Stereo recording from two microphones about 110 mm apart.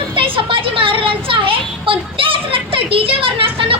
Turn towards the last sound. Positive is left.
turn(degrees=-55)  # may be behind; listen again after turning